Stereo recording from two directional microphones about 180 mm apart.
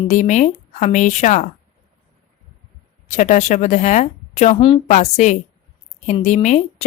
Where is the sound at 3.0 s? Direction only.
40° left (ahead or behind).